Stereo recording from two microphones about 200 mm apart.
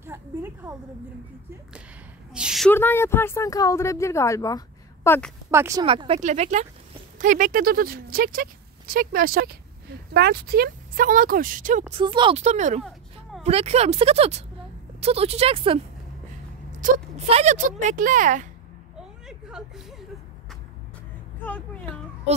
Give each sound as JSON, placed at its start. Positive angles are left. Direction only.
{"t": 0.0, "sound": "a woman's voice", "side_deg": -10}
{"t": 2.3, "sound": "a woman's voice", "side_deg": 0}
{"t": 2.7, "sound": "speech", "side_deg": 10}
{"t": 5.5, "sound": "speech", "side_deg": -15}
{"t": 11.9, "sound": "speech", "side_deg": -25}
{"t": 16.8, "sound": "speech", "side_deg": -35}
{"t": 18.9, "sound": "a sound", "side_deg": -5}
{"t": 21.4, "sound": "speech", "side_deg": 5}